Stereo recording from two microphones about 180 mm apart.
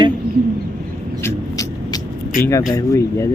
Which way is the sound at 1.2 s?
20° left (ahead or behind).